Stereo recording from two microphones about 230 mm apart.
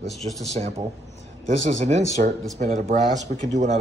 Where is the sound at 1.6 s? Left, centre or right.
Right.